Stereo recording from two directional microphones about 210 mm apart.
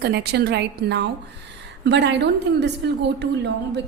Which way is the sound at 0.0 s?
50° right (ahead or behind).